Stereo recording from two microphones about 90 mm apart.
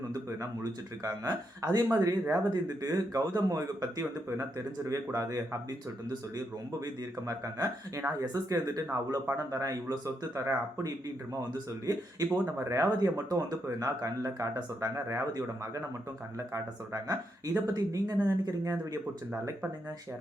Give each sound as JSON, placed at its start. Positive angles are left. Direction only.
{"t": 0.6, "sound": "speech", "side_deg": -40}
{"t": 7.3, "sound": "speech", "side_deg": -40}